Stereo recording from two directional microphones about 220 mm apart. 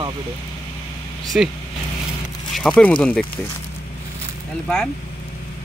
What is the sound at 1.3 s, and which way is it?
Speech, 5° right (ahead or behind).